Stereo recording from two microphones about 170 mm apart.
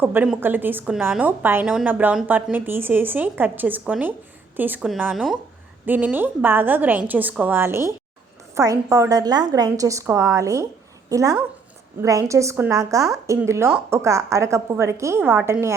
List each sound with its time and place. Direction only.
0.0 s a woman's voice: 10° right (ahead or behind)